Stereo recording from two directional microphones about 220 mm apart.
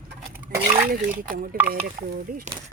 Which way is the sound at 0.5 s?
10° right (ahead or behind).